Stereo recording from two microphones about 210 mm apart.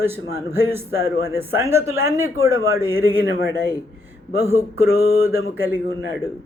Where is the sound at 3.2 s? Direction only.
50° left (ahead or behind).